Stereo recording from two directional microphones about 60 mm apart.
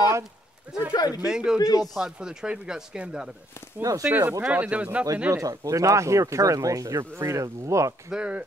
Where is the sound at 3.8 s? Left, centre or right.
Right.